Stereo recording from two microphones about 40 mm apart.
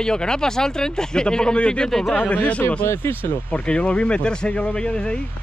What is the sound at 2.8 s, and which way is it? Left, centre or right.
Speech, left.